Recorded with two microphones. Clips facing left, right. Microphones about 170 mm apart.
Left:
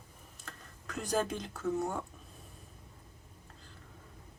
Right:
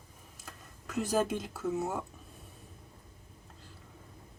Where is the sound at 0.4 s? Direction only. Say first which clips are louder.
Even; 5° right (ahead or behind).